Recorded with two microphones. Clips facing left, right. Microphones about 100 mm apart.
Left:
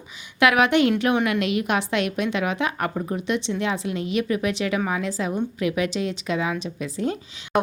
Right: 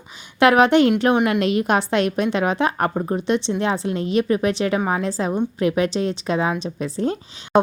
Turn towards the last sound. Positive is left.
turn(degrees=-35)  # may be behind; listen again after turning